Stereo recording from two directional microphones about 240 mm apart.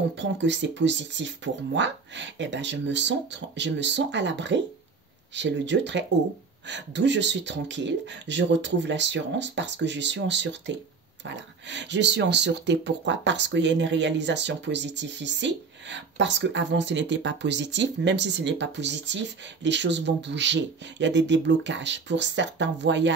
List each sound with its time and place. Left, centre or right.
0.1 s speech: right